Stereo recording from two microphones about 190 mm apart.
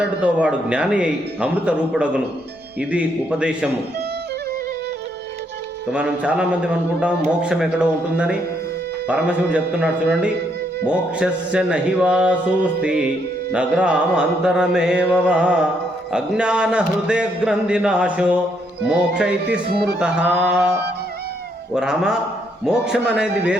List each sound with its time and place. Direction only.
0.0 s a man's voice: 5° right (ahead or behind)
5.9 s a man's voice: 5° right (ahead or behind)
19.5 s speech: 65° right (ahead or behind)
20.0 s a man's voice: 5° right (ahead or behind)
21.8 s a man's voice: 5° right (ahead or behind)